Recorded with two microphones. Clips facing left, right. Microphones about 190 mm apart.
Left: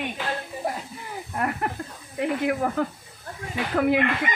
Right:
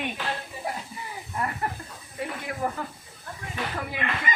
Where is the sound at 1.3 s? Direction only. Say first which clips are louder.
Left 3 dB; 65° left (ahead or behind).